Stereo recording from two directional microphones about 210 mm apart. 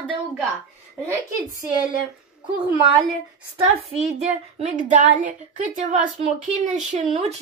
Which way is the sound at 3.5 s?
30° right (ahead or behind).